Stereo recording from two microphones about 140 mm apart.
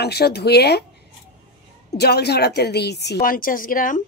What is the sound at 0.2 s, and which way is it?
Speech, 90° left.